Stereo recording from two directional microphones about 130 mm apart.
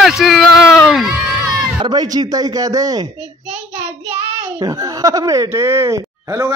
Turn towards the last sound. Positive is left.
turn(degrees=-20)  # may be behind; listen again after turning